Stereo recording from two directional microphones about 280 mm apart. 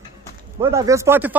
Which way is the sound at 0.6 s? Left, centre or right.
Centre.